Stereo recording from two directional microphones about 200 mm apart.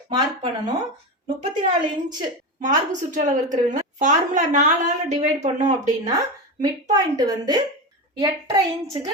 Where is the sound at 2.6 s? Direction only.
40° right (ahead or behind).